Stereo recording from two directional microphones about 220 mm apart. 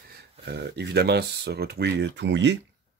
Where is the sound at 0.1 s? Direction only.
50° right (ahead or behind).